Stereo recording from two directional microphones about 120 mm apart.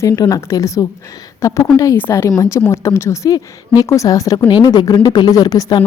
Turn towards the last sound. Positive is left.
turn(degrees=35)  # may be behind; listen again after turning